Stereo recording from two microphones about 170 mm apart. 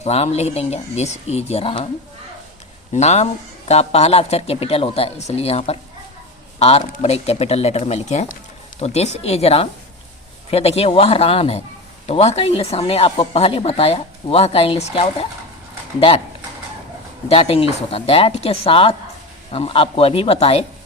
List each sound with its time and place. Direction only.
0.0 s speech: 40° left (ahead or behind)
2.9 s speech: 40° left (ahead or behind)
17.2 s speech: 35° left (ahead or behind)